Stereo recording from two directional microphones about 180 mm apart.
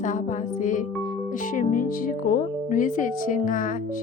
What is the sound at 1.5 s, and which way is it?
Speech, 50° left (ahead or behind).